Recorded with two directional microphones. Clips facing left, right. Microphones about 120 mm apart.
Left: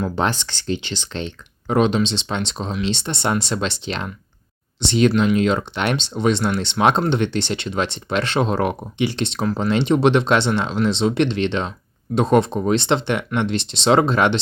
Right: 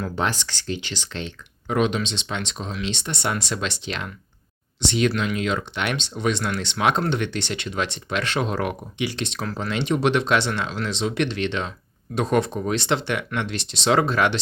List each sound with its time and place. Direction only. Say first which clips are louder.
0.0 s speech: left 4 dB; 30° left (ahead or behind)